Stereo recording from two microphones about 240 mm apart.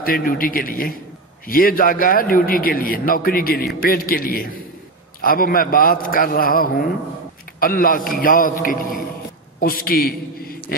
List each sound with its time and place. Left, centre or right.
0.0 s a man's voice: left